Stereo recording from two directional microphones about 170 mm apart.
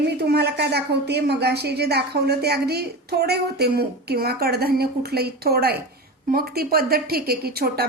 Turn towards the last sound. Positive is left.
turn(degrees=-65)  # may be behind; listen again after turning